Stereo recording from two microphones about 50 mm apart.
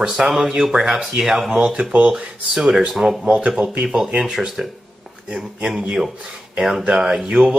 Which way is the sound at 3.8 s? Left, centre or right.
Centre.